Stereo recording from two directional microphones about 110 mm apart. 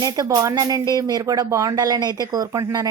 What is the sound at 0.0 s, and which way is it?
Speech, 35° right (ahead or behind).